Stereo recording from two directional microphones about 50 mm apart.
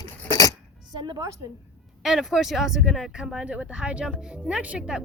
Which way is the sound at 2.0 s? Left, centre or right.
Centre.